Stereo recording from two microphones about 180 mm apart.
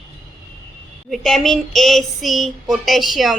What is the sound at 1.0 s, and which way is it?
Child singing, centre (ahead or behind).